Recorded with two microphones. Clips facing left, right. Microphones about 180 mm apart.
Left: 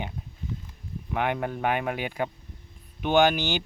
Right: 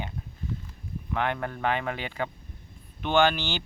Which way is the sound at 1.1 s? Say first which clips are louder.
Left 2 dB; 15° left (ahead or behind).